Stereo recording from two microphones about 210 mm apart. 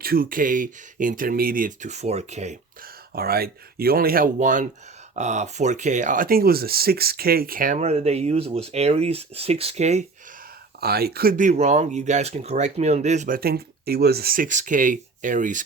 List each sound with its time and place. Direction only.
0.0 s speech: 45° right (ahead or behind)
10.8 s speech: 50° right (ahead or behind)